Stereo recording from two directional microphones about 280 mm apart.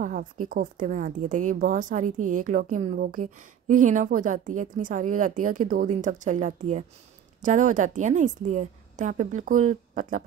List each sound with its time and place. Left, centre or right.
0.0 s a woman's voice: right